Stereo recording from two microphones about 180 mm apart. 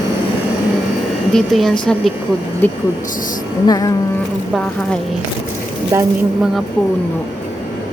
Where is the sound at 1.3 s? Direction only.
Centre (ahead or behind).